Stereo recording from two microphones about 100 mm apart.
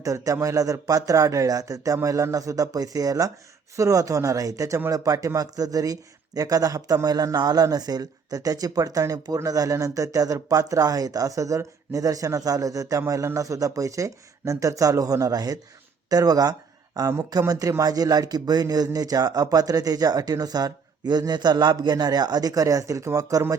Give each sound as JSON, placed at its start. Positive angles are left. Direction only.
{"t": 0.0, "sound": "a man's voice", "side_deg": -35}